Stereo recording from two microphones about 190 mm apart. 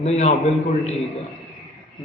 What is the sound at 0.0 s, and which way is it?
Speech, 35° left (ahead or behind).